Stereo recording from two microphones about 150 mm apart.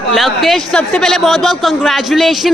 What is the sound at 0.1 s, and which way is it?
A man's voice, centre (ahead or behind).